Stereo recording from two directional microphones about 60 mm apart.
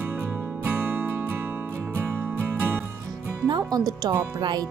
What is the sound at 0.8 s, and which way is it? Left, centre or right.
Music, right.